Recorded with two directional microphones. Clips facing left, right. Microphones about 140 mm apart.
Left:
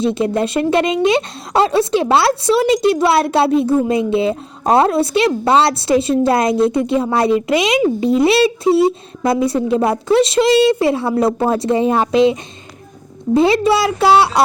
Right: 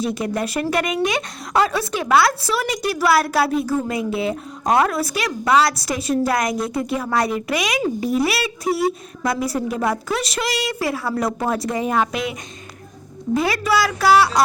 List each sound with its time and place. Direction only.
0.0 s speech: 25° left (ahead or behind)